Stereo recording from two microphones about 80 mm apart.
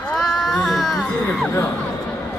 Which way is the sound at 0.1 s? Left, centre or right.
Centre.